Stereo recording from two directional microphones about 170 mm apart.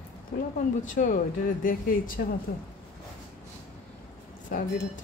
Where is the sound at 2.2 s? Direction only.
70° left (ahead or behind).